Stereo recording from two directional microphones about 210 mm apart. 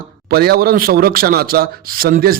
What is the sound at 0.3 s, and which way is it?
A man's voice, 45° right (ahead or behind).